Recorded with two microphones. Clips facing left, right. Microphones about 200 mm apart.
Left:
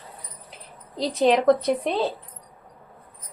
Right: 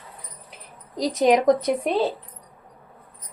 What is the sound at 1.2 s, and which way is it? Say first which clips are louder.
Speech: right 1 dB; 10° right (ahead or behind).